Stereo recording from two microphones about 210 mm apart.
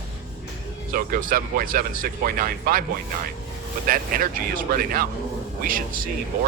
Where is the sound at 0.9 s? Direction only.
40° right (ahead or behind).